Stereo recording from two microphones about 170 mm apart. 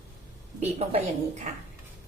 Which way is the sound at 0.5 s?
40° right (ahead or behind).